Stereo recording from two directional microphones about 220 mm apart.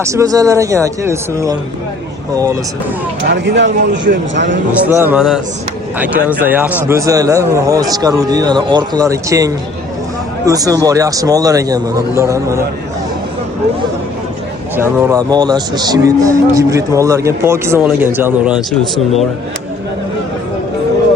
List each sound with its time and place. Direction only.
0.0 s speech: 15° right (ahead or behind)
3.2 s speech: 50° right (ahead or behind)
4.9 s speech: 10° right (ahead or behind)
14.8 s speech: 10° right (ahead or behind)